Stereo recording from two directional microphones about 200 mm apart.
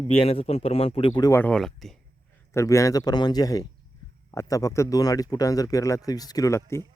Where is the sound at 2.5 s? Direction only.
15° left (ahead or behind).